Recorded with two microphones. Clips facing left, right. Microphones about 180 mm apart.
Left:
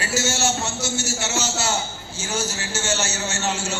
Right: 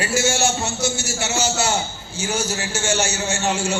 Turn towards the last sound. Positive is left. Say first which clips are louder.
# right 4 dB
turn(degrees=-15)  # may be behind; listen again after turning